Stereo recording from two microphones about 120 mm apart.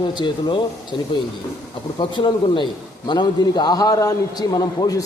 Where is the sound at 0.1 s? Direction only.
40° left (ahead or behind).